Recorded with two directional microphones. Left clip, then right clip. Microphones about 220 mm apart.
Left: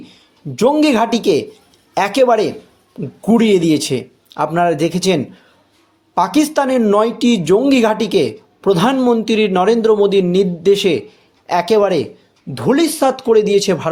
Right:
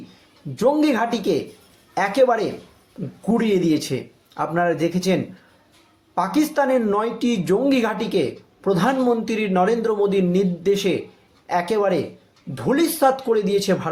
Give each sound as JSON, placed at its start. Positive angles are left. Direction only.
{"t": 0.5, "sound": "speech", "side_deg": 40}